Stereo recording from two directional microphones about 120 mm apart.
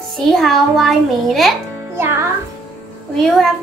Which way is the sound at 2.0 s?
20° right (ahead or behind).